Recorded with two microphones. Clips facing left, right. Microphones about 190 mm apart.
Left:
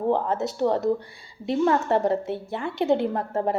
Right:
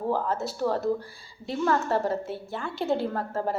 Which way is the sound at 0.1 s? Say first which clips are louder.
Left 3 dB; 20° left (ahead or behind).